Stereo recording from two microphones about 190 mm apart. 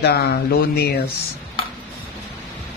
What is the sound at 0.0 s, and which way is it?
Speech, 55° left (ahead or behind).